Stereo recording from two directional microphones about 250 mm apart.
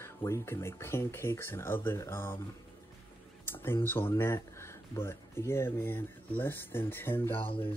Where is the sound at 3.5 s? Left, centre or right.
Centre.